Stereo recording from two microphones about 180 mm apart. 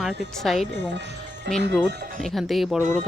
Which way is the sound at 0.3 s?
Centre (ahead or behind).